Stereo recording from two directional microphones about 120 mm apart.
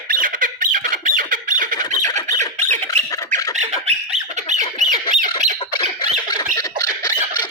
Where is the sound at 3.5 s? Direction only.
70° right (ahead or behind).